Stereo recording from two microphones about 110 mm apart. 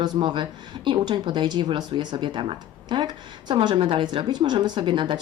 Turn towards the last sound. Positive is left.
turn(degrees=-45)  # may be behind; listen again after turning